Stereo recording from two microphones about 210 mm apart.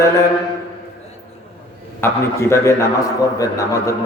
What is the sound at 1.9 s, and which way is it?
A man's voice, 10° left (ahead or behind).